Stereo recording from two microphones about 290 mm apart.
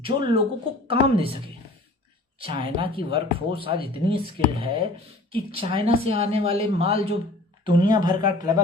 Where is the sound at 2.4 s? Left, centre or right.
Centre.